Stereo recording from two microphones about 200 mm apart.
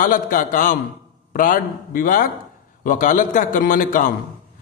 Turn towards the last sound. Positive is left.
turn(degrees=45)  # may be behind; listen again after turning